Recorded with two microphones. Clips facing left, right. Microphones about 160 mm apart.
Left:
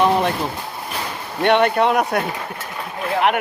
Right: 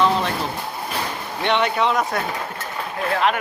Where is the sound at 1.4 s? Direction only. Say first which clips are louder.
Left 5 dB; 55° left (ahead or behind).